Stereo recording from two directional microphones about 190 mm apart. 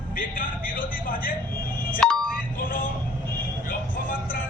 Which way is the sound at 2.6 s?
50° left (ahead or behind).